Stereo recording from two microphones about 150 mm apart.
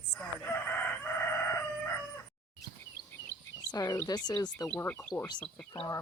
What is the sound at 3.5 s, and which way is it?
Speech, 25° left (ahead or behind).